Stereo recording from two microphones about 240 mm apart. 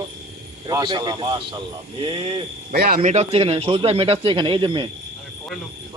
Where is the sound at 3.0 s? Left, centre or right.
Right.